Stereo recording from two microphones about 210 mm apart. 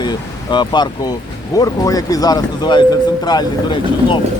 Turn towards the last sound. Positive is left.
turn(degrees=20)  # may be behind; listen again after turning